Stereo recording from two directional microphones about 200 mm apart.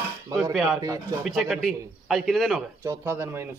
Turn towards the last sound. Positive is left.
turn(degrees=-10)  # may be behind; listen again after turning